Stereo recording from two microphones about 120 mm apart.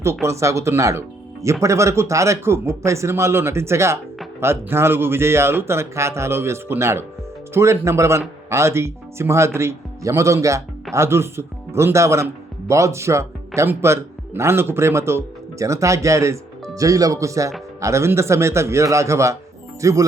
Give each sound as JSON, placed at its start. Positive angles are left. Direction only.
{"t": 0.0, "sound": "a man's voice", "side_deg": -20}